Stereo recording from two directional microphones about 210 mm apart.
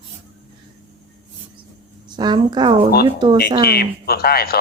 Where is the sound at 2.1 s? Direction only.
20° right (ahead or behind).